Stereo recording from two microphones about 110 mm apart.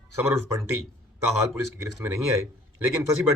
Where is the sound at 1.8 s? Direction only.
30° right (ahead or behind).